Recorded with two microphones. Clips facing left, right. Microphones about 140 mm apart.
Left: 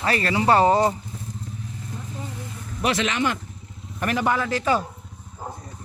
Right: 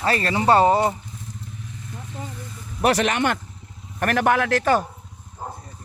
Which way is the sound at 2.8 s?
50° right (ahead or behind).